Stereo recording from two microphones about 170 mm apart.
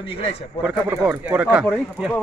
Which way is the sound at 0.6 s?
10° right (ahead or behind).